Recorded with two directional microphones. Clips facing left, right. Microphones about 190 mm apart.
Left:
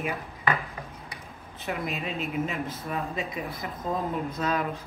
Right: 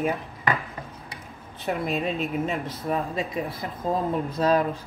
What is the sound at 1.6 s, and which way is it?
Speech, 35° right (ahead or behind).